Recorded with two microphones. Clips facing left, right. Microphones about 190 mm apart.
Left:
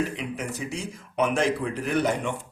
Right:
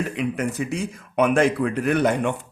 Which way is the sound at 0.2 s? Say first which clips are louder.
Right 7 dB; 55° right (ahead or behind).